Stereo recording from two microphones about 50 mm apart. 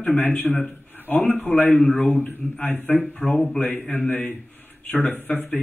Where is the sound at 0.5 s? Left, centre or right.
Centre.